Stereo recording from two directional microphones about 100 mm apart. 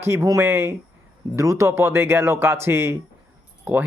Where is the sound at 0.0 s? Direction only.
30° right (ahead or behind).